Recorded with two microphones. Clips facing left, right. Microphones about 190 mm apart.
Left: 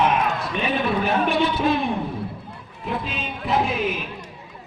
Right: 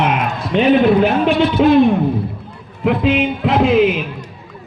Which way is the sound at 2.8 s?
90° right.